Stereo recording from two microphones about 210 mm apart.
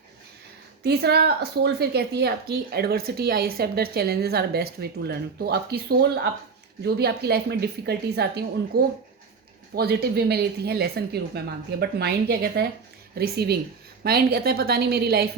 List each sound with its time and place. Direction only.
0.9 s a woman's voice: 50° right (ahead or behind)